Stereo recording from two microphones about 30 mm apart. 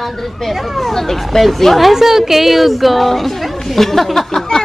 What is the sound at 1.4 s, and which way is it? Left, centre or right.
Speech, centre.